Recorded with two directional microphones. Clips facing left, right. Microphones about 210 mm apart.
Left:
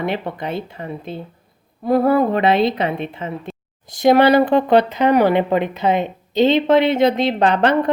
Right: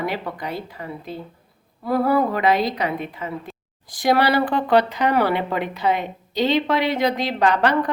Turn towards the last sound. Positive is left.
turn(degrees=25)  # may be behind; listen again after turning